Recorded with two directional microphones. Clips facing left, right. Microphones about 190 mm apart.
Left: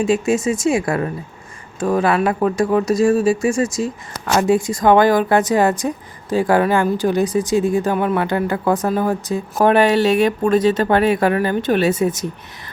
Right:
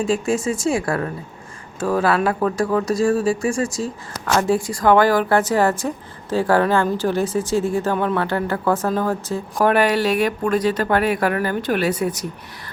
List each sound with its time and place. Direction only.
0.1 s speech: 20° left (ahead or behind)